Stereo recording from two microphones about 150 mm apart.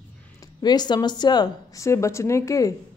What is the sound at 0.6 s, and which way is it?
Speech, 30° left (ahead or behind).